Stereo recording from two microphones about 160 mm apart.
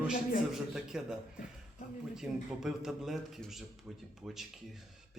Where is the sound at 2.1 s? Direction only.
5° right (ahead or behind).